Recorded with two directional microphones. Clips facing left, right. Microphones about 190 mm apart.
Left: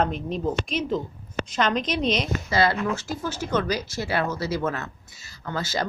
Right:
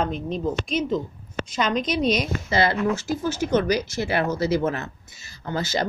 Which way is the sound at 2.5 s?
20° right (ahead or behind).